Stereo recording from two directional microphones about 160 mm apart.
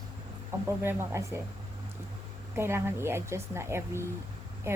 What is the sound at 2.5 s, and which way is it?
A woman's voice, 15° right (ahead or behind).